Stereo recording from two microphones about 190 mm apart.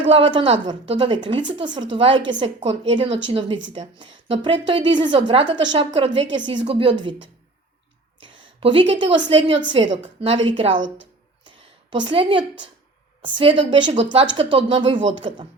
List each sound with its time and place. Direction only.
0.0 s a woman's voice: 25° right (ahead or behind)
8.2 s a woman's voice: 25° right (ahead or behind)
10.8 s speech: 85° right
11.4 s a sound: 25° right (ahead or behind)
13.2 s a woman's voice: 25° right (ahead or behind)